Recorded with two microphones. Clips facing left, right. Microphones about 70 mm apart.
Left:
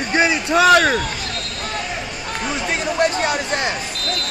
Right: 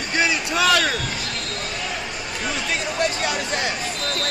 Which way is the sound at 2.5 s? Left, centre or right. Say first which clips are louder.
Left 3 dB; left.